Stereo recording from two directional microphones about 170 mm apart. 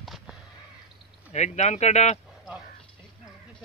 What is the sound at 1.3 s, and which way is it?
Speech, 45° left (ahead or behind).